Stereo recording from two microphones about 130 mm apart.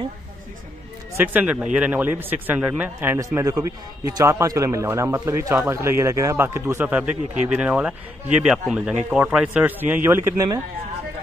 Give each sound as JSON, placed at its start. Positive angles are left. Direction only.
{"t": 1.1, "sound": "a man's voice", "side_deg": -15}